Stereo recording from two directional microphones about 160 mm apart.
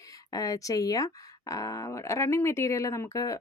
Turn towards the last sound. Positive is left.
turn(degrees=20)  # may be behind; listen again after turning